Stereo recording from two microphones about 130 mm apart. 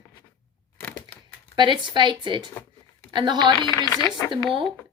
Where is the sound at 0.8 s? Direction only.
10° left (ahead or behind).